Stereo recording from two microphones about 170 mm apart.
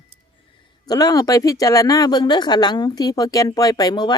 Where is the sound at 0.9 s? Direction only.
20° left (ahead or behind).